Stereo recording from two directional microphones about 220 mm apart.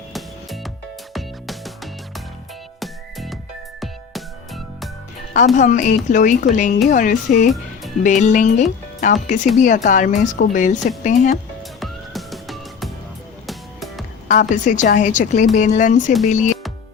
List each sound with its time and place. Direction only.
0.1 s music: centre (ahead or behind)
5.5 s speech: 35° left (ahead or behind)
11.8 s music: centre (ahead or behind)
14.3 s speech: 35° left (ahead or behind)